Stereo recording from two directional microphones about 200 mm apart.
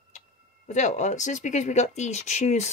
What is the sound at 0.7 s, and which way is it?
Speech, 35° left (ahead or behind).